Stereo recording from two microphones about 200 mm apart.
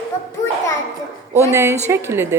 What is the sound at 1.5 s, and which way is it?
Speech, 15° right (ahead or behind).